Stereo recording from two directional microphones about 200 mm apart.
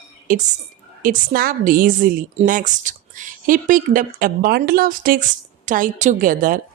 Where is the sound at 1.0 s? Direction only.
45° right (ahead or behind).